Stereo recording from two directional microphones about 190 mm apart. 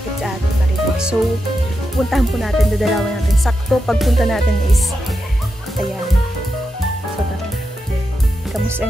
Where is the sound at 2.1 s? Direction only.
Centre (ahead or behind).